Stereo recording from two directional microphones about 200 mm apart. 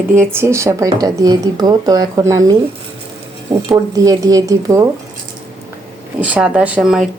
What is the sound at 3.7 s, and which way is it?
Speech, 20° right (ahead or behind).